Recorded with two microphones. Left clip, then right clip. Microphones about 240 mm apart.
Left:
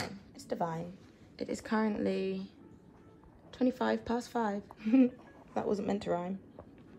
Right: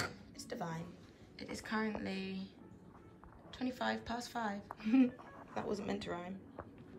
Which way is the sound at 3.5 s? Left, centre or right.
Centre.